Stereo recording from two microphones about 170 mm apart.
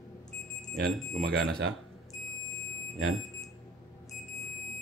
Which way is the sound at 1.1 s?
60° right (ahead or behind).